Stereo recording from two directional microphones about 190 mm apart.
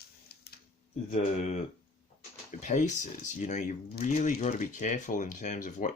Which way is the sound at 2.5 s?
40° left (ahead or behind).